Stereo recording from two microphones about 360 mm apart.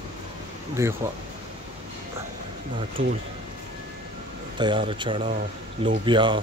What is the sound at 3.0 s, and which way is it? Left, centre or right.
Speech, right.